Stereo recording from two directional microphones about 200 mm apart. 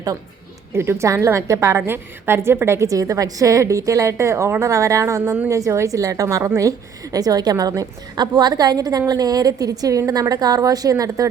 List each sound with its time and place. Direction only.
0.7 s a woman's voice: 10° right (ahead or behind)